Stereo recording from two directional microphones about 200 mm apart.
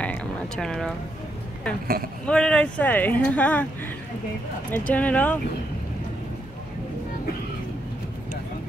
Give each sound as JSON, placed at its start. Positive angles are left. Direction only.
{"t": 0.0, "sound": "a sound", "side_deg": 5}
{"t": 2.2, "sound": "speech", "side_deg": 5}
{"t": 4.6, "sound": "speech", "side_deg": 10}